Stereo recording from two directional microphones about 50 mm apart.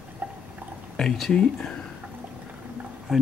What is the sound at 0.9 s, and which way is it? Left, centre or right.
Speech, centre.